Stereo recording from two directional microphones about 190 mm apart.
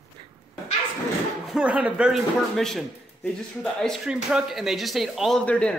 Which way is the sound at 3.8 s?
5° right (ahead or behind).